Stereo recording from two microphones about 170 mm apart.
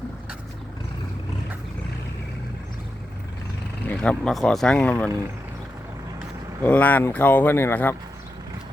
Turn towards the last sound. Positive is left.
turn(degrees=10)  # may be behind; listen again after turning